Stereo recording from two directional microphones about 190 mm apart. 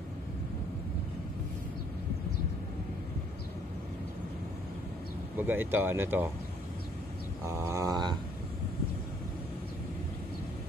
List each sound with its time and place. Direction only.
5.4 s speech: 10° right (ahead or behind)
7.4 s speech: 15° right (ahead or behind)